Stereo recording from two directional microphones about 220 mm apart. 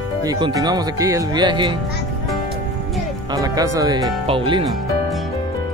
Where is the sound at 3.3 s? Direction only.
15° right (ahead or behind).